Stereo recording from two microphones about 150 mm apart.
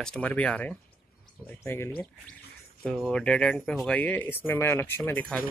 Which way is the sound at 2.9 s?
5° left (ahead or behind).